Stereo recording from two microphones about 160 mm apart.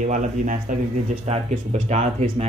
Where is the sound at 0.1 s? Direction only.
50° right (ahead or behind).